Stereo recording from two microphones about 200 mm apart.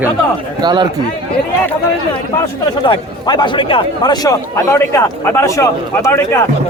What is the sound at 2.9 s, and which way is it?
Speech, 20° left (ahead or behind).